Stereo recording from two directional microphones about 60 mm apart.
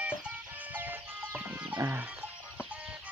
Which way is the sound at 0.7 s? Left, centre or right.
Right.